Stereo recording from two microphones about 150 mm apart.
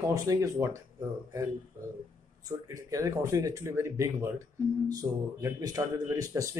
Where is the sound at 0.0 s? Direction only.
20° right (ahead or behind).